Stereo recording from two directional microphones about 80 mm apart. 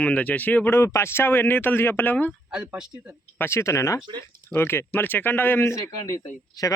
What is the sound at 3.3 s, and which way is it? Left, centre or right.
Speech, left.